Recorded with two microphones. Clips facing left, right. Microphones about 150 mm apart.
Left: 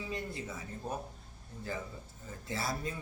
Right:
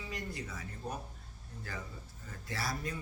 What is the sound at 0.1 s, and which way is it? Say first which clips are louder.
Speech: left 3 dB; 25° left (ahead or behind).